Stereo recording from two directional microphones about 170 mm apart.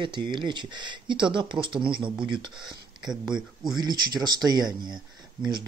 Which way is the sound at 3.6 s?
25° right (ahead or behind).